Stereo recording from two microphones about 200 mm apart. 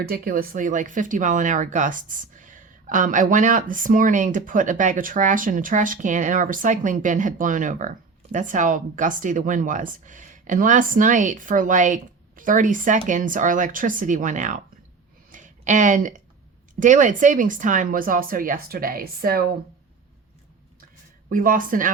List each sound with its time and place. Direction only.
0.1 s speech: 45° right (ahead or behind)
15.3 s a sound: 40° right (ahead or behind)
16.8 s speech: 40° right (ahead or behind)
21.2 s speech: 45° right (ahead or behind)